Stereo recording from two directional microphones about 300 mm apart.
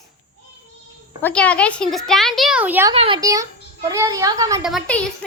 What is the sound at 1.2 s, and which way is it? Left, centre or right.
A child's voice, centre.